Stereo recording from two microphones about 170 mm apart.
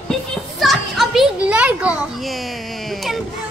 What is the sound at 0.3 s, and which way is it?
Children playing, centre (ahead or behind).